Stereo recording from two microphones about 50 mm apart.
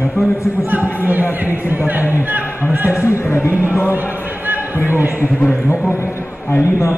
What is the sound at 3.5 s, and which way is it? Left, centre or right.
Speech, right.